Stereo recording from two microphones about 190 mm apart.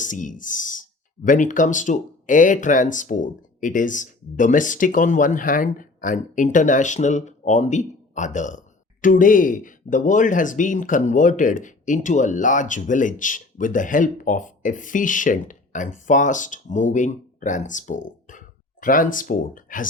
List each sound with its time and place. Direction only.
0.0 s speech: 40° left (ahead or behind)